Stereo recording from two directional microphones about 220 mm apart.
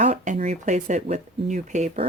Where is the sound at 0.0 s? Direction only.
30° right (ahead or behind).